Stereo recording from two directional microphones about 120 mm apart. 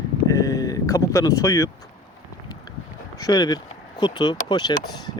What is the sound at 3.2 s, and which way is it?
Speech, 35° left (ahead or behind).